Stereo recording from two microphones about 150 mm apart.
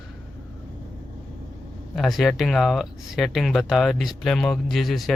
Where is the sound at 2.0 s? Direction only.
Centre (ahead or behind).